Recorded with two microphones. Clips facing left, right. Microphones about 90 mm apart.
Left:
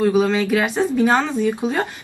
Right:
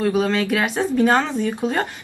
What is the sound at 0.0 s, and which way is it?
Speech, 10° left (ahead or behind).